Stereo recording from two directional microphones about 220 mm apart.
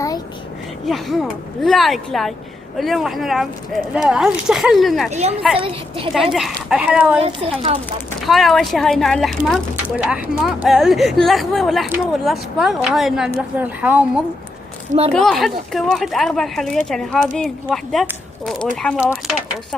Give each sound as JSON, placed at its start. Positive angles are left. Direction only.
{"t": 0.9, "sound": "speech", "side_deg": 0}
{"t": 5.5, "sound": "a child's voice", "side_deg": -25}
{"t": 6.1, "sound": "speech", "side_deg": 0}
{"t": 7.2, "sound": "a child's voice", "side_deg": -25}
{"t": 8.3, "sound": "a woman's voice", "side_deg": 0}
{"t": 15.1, "sound": "speech", "side_deg": 0}